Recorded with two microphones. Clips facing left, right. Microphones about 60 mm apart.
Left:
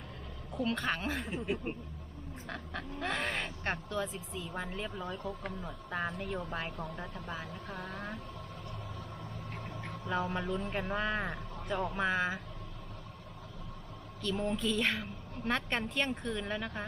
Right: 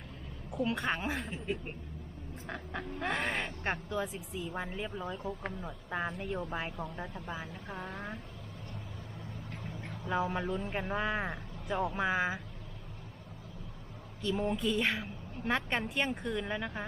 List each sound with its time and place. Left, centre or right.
0.6 s speech: centre
1.2 s speech: centre
2.5 s speech: centre
3.2 s speech: centre; by 8.2 s right
10.1 s speech: centre
14.2 s speech: right